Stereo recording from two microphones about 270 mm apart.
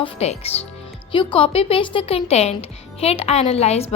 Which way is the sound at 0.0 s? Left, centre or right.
Left.